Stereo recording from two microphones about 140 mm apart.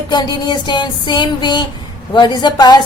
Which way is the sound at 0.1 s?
30° left (ahead or behind).